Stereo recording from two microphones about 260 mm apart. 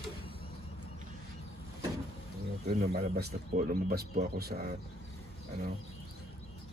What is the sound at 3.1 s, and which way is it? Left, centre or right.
Speech, right.